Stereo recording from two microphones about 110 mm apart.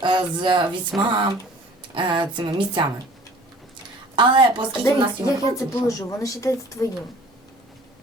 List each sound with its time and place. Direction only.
0.0 s a woman's voice: 45° right (ahead or behind)
4.1 s a woman's voice: 50° right (ahead or behind)
5.2 s speech: 30° left (ahead or behind)